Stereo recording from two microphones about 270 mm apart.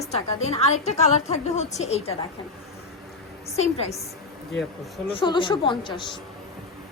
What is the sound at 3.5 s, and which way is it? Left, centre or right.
Speech, left.